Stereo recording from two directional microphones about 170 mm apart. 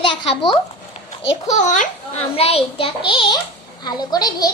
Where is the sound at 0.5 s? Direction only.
35° left (ahead or behind).